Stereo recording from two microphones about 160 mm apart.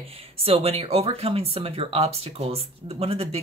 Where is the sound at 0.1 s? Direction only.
40° right (ahead or behind).